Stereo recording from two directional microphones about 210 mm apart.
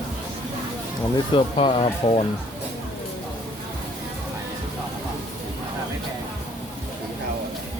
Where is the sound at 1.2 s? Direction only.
25° left (ahead or behind).